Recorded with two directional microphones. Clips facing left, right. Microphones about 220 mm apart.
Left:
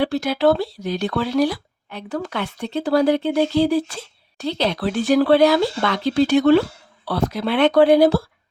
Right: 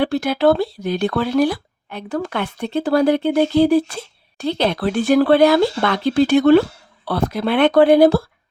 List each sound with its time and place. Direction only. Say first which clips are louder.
0.0 s speech: right 2 dB; 55° right (ahead or behind)